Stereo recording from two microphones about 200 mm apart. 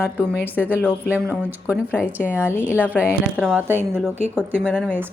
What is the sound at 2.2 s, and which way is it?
Speech, 10° left (ahead or behind).